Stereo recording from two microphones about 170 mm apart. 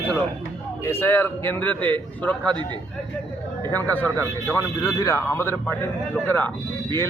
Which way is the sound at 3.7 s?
10° left (ahead or behind).